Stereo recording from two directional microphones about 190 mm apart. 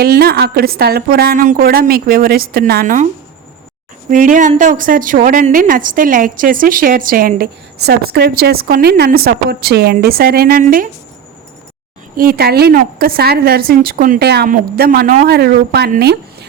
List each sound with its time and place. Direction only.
0.0 s a woman's voice: 55° right (ahead or behind)
4.1 s a woman's voice: 45° right (ahead or behind)
12.1 s a woman's voice: 50° right (ahead or behind)